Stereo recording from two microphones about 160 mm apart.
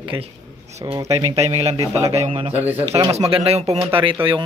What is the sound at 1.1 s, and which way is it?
Speech, 40° right (ahead or behind).